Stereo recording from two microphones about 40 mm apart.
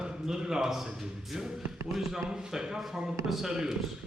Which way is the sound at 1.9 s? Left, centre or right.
Centre.